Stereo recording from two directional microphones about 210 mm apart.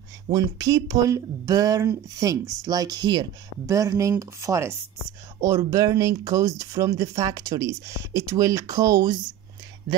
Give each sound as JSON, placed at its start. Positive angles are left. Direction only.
{"t": 0.3, "sound": "speech", "side_deg": -15}